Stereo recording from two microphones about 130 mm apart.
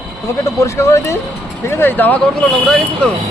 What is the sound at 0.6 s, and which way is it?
Speech, 25° left (ahead or behind).